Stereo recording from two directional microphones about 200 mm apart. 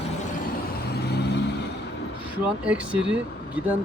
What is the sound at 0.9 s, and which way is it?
Vehicle, 55° left (ahead or behind).